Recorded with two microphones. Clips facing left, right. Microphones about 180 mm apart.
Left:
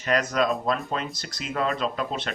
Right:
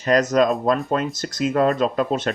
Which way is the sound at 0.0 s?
40° right (ahead or behind).